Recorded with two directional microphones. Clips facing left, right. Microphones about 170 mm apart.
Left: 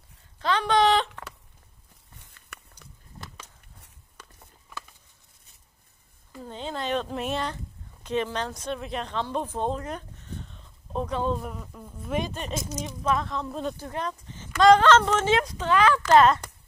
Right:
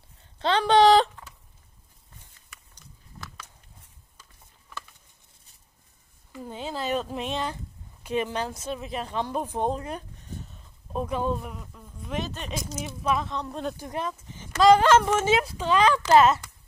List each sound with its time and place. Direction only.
0.4 s speech: 30° right (ahead or behind)
2.1 s a sound: 65° left (ahead or behind)
3.8 s a sound: 65° left (ahead or behind)
6.4 s speech: 10° right (ahead or behind)
8.0 s speech: 10° right (ahead or behind)
11.7 s speech: 10° left (ahead or behind)
13.7 s speech: 15° right (ahead or behind)